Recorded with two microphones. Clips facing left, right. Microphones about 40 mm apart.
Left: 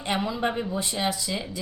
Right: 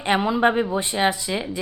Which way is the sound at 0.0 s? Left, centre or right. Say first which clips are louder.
Right 7 dB; right.